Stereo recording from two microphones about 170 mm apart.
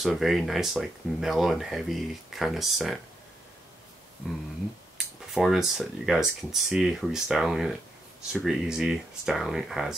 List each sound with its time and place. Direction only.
0.0 s speech: centre (ahead or behind)
4.2 s speech: 5° right (ahead or behind)